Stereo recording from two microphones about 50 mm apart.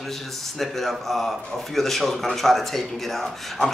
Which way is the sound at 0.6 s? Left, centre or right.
Centre.